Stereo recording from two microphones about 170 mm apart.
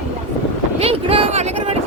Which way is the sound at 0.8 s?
35° right (ahead or behind).